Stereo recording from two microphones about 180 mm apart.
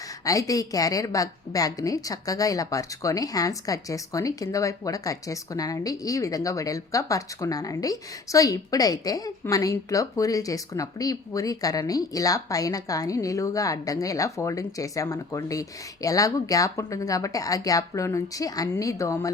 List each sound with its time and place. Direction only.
0.3 s a woman's voice: 20° left (ahead or behind)